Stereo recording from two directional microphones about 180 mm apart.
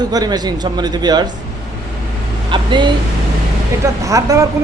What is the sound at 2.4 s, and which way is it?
Vehicle, 25° right (ahead or behind).